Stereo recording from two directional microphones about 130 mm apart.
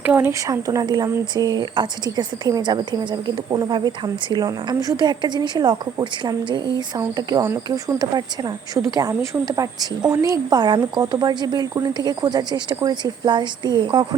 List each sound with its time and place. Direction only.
0.0 s speech: 15° right (ahead or behind); by 14.1 s 35° right (ahead or behind)